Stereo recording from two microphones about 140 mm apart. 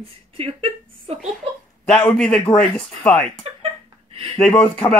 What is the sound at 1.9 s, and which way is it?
Speech, 5° left (ahead or behind).